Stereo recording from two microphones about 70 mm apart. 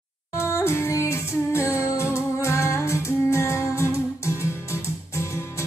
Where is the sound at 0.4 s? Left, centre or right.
Left.